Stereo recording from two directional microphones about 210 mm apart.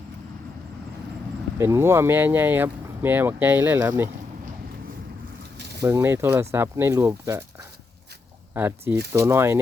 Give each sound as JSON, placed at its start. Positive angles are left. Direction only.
{"t": 1.5, "sound": "speech", "side_deg": -15}
{"t": 5.5, "sound": "a sound", "side_deg": -50}
{"t": 5.8, "sound": "speech", "side_deg": -10}
{"t": 8.5, "sound": "speech", "side_deg": -10}